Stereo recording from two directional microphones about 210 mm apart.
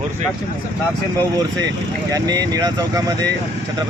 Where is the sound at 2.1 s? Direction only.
20° right (ahead or behind).